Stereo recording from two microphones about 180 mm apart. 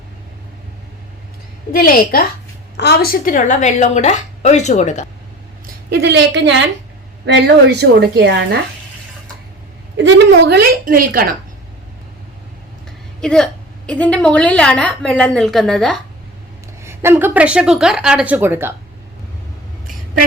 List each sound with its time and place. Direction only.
1.7 s a woman's voice: 55° left (ahead or behind)
5.6 s a woman's voice: 65° right (ahead or behind); by 6.7 s 90° right
7.3 s a woman's voice: 75° right (ahead or behind)
10.0 s a woman's voice: 70° right (ahead or behind); by 11.3 s 55° right (ahead or behind)
13.2 s a woman's voice: 5° left (ahead or behind)
16.8 s a woman's voice: 15° right (ahead or behind)